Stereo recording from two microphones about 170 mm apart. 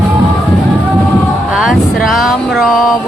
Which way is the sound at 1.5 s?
Centre (ahead or behind).